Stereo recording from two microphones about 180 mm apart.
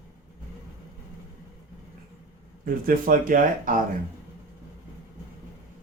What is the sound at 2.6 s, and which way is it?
Speech, 50° right (ahead or behind).